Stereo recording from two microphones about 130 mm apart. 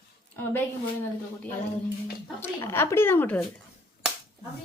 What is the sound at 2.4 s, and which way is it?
Speech, 20° left (ahead or behind).